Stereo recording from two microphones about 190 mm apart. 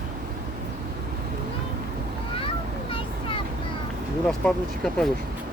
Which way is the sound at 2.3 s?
30° left (ahead or behind).